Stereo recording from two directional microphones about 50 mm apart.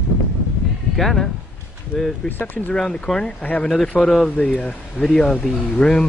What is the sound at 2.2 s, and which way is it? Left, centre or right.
Speech, left.